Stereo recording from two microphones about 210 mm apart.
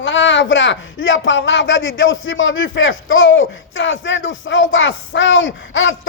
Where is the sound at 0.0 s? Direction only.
60° left (ahead or behind).